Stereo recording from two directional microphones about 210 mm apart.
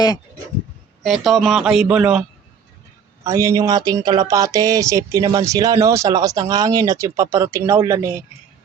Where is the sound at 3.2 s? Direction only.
15° right (ahead or behind).